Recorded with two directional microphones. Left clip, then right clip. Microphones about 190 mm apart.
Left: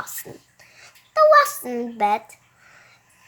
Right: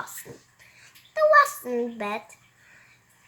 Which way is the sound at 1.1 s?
55° left (ahead or behind).